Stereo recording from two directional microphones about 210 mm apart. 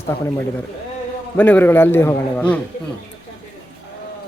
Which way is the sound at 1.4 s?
10° left (ahead or behind).